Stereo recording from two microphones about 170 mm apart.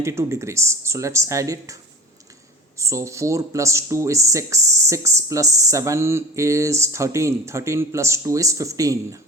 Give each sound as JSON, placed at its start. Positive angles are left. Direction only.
{"t": 0.0, "sound": "speech", "side_deg": -15}
{"t": 2.7, "sound": "speech", "side_deg": -15}